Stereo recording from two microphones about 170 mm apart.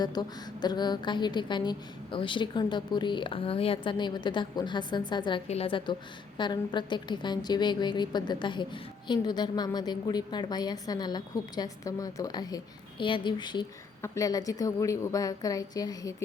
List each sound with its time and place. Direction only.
0.0 s a woman's voice: 25° left (ahead or behind)